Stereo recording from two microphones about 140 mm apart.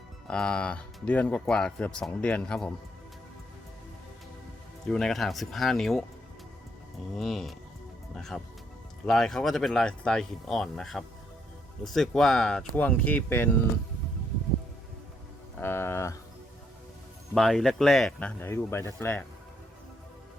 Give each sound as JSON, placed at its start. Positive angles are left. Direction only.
{"t": 0.3, "sound": "speech", "side_deg": 5}
{"t": 4.9, "sound": "speech", "side_deg": 5}
{"t": 7.2, "sound": "speech", "side_deg": 0}
{"t": 15.6, "sound": "a sound", "side_deg": 15}
{"t": 17.3, "sound": "speech", "side_deg": 0}